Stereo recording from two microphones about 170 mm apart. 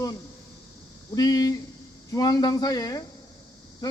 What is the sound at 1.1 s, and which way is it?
Speech, 25° left (ahead or behind).